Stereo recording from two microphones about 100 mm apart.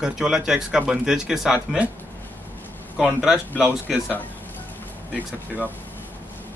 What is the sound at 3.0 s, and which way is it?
Speech, 5° right (ahead or behind).